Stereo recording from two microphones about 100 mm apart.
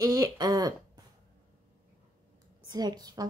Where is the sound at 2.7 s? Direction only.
40° right (ahead or behind).